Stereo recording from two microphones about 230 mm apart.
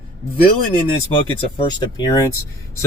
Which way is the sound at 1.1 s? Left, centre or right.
Left.